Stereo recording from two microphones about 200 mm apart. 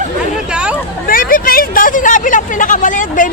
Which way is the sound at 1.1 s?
45° left (ahead or behind).